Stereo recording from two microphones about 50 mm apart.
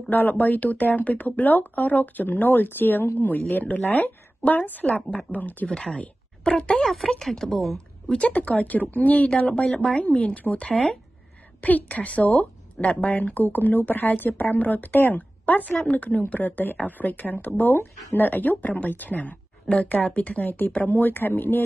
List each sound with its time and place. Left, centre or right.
0.1 s speech: left
6.4 s speech: centre
6.8 s a woman's voice: centre
8.1 s speech: left
10.6 s speech: centre
11.6 s speech: left
20.4 s speech: left